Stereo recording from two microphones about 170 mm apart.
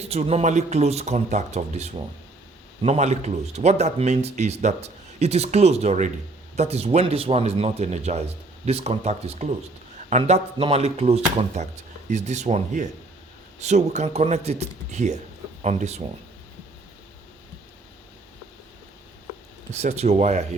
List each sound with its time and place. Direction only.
0.0 s speech: 35° right (ahead or behind)
19.7 s speech: 40° right (ahead or behind)